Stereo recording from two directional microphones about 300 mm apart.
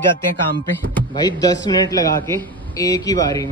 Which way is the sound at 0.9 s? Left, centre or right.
Centre.